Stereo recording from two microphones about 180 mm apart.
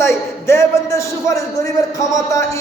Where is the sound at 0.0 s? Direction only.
15° left (ahead or behind).